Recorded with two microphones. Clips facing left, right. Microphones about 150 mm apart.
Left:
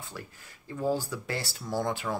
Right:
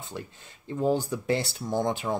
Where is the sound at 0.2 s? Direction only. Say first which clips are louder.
Right 4 dB; 20° right (ahead or behind).